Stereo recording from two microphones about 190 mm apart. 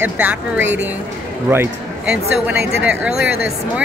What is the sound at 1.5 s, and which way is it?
A woman's voice, 10° right (ahead or behind).